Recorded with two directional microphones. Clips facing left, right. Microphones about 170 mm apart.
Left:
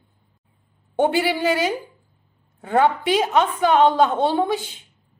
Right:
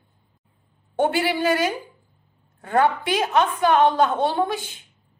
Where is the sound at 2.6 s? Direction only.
20° left (ahead or behind).